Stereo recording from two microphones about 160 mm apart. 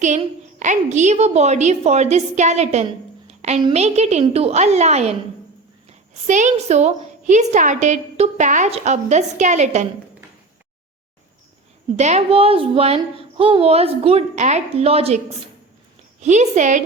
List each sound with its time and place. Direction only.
0.6 s a woman's voice: 50° right (ahead or behind)
3.2 s a sound: 45° right (ahead or behind)
3.7 s a woman's voice: 45° right (ahead or behind)
6.2 s a woman's voice: 50° right (ahead or behind)
11.9 s a woman's voice: 45° right (ahead or behind)